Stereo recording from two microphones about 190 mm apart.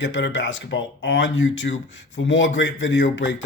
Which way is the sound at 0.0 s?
70° left (ahead or behind).